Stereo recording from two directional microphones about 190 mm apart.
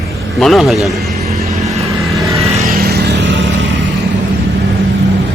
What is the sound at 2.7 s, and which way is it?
Vehicle, 55° right (ahead or behind).